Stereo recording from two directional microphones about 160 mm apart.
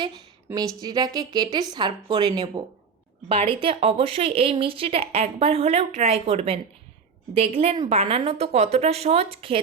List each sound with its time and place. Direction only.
0.4 s a woman's voice: 20° right (ahead or behind)